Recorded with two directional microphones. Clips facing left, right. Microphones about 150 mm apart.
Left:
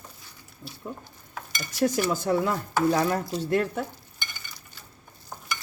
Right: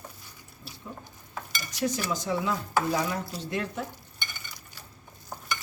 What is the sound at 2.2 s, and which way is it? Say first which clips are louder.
Speech: left 4 dB; 50° left (ahead or behind).